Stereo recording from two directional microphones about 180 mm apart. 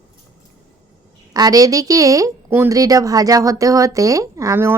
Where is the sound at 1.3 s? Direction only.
20° right (ahead or behind).